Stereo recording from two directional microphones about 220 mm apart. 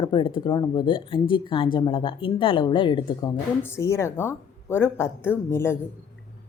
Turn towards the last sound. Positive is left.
turn(degrees=10)  # may be behind; listen again after turning